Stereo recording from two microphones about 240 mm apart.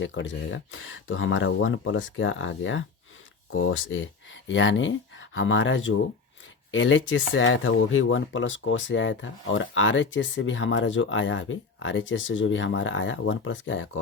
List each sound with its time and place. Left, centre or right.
0.0 s speech: left